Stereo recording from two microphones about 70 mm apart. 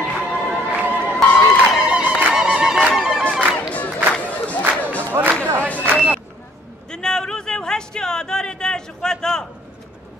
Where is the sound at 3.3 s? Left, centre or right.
Right.